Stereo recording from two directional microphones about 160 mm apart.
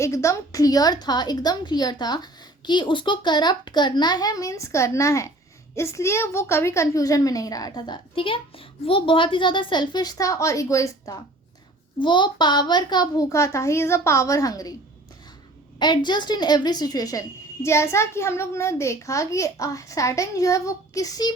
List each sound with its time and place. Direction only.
0.0 s a woman's voice: 20° left (ahead or behind)
11.9 s a woman's voice: 30° left (ahead or behind)
15.8 s a woman's voice: 30° left (ahead or behind)